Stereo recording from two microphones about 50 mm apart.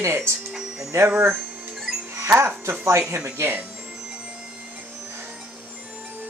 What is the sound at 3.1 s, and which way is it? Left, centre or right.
Speech, right.